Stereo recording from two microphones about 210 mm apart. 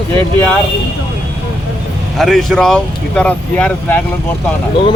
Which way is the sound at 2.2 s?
Centre (ahead or behind).